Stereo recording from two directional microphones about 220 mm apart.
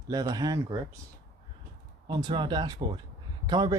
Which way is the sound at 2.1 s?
20° right (ahead or behind).